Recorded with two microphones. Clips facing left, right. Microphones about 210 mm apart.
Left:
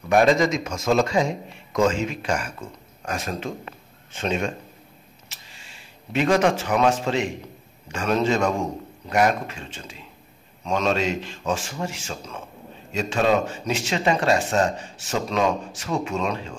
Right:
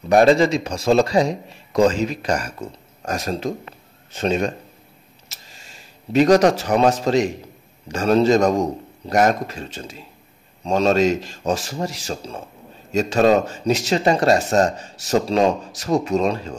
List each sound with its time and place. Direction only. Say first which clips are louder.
0.1 s speech: right 4 dB; 35° right (ahead or behind)